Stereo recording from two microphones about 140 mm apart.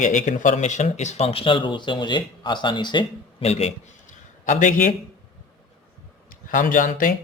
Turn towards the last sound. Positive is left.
turn(degrees=75)  # may be behind; listen again after turning